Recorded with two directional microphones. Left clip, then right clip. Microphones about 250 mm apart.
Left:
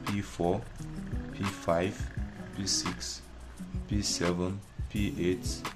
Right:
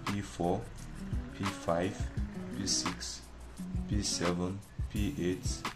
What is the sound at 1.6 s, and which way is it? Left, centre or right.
Speech, centre.